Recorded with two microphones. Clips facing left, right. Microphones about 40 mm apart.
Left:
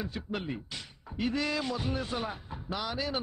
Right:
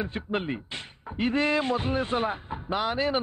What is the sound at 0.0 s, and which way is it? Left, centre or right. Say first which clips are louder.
Speech: right 6 dB; right.